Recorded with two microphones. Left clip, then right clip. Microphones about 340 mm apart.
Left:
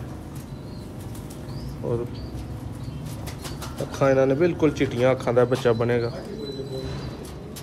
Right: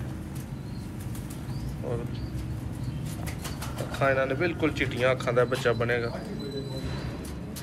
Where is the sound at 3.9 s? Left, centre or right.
Centre.